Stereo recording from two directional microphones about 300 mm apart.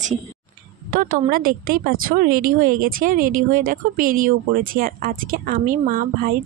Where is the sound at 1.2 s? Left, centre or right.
Right.